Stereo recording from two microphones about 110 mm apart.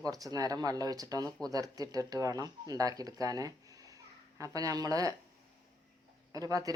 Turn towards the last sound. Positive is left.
turn(degrees=-30)  # may be behind; listen again after turning